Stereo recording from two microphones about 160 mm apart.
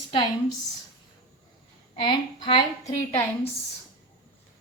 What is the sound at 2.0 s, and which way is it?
Speech, 30° left (ahead or behind).